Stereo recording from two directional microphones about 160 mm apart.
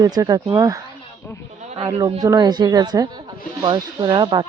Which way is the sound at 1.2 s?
15° left (ahead or behind).